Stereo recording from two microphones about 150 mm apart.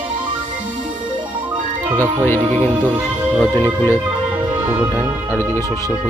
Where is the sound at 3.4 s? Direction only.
15° left (ahead or behind).